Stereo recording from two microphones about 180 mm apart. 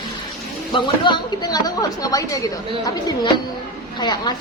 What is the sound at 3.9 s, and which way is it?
Speech, 25° left (ahead or behind).